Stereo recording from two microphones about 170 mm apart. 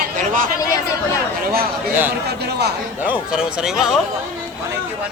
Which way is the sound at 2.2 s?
75° right (ahead or behind).